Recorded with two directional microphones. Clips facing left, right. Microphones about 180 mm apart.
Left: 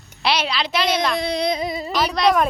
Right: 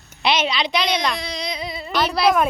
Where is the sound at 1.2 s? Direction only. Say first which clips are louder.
Left 7 dB; 55° left (ahead or behind).